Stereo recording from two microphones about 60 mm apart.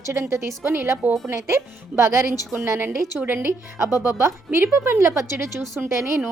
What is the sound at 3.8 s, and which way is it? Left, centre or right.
Speech, right.